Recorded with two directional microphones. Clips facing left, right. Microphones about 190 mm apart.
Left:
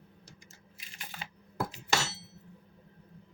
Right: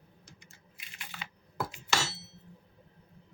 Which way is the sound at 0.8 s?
40° left (ahead or behind).